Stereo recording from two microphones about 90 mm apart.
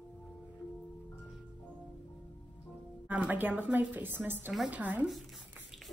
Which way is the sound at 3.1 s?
15° right (ahead or behind).